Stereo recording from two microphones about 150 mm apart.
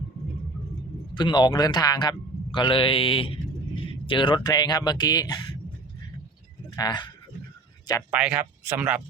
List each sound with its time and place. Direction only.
1.1 s a man's voice: 30° left (ahead or behind)
6.7 s speech: 30° left (ahead or behind)
8.1 s speech: 10° right (ahead or behind)